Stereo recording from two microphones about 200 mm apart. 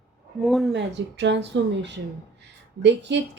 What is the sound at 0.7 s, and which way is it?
A woman's voice, 60° right (ahead or behind).